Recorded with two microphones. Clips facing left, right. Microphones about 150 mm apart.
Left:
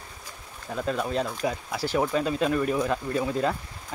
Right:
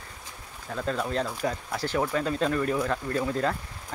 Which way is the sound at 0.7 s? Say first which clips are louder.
Left 1 dB; 10° left (ahead or behind).